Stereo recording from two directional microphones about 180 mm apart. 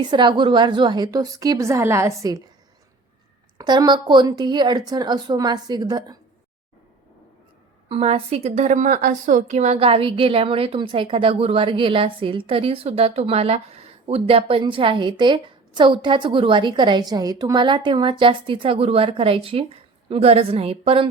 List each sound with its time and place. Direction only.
0.0 s a woman's voice: 25° right (ahead or behind)
3.6 s a woman's voice: 25° right (ahead or behind)
7.9 s a woman's voice: 35° right (ahead or behind)